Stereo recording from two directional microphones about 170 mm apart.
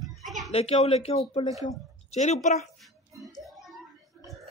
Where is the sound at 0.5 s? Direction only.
35° left (ahead or behind).